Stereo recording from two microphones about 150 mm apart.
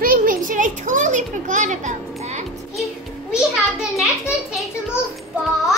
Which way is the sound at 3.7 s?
Centre (ahead or behind).